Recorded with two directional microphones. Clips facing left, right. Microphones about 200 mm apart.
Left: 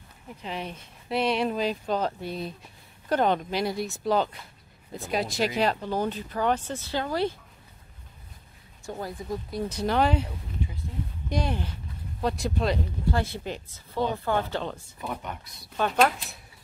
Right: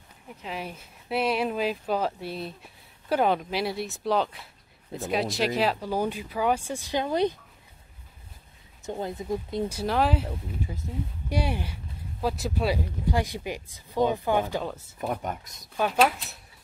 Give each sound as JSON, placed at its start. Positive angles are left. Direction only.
{"t": 0.3, "sound": "speech", "side_deg": -5}
{"t": 8.8, "sound": "speech", "side_deg": -25}
{"t": 9.7, "sound": "speech", "side_deg": -5}
{"t": 15.0, "sound": "speech", "side_deg": -45}
{"t": 15.6, "sound": "speech", "side_deg": -10}